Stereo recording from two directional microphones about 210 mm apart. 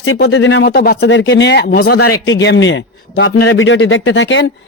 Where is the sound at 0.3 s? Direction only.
60° left (ahead or behind).